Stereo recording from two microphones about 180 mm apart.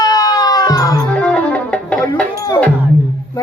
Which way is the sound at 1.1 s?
5° left (ahead or behind).